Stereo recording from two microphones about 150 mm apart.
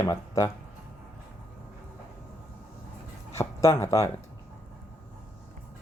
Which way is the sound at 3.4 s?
20° left (ahead or behind).